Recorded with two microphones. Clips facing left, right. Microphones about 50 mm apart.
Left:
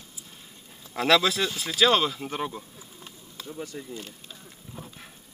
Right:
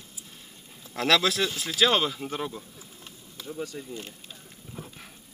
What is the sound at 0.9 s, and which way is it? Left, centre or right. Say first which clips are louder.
Speech: left 2 dB; centre.